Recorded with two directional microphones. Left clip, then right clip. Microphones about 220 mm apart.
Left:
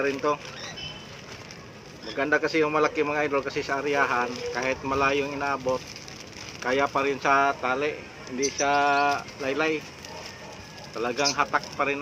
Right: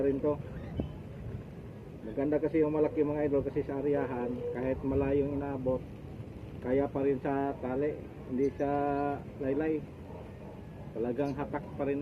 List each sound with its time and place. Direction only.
0.0 s speech: 35° left (ahead or behind)
2.1 s speech: 40° left (ahead or behind)
11.0 s speech: 40° left (ahead or behind)